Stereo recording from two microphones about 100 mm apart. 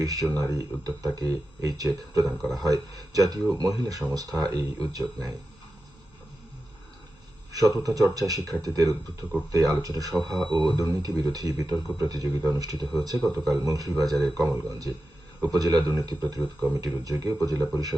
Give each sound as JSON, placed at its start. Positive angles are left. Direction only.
{"t": 0.0, "sound": "speech", "side_deg": -35}
{"t": 2.2, "sound": "speech", "side_deg": 0}
{"t": 2.6, "sound": "speech", "side_deg": -40}
{"t": 7.8, "sound": "speech", "side_deg": -30}